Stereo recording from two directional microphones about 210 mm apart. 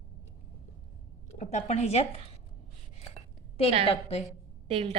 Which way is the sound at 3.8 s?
30° left (ahead or behind).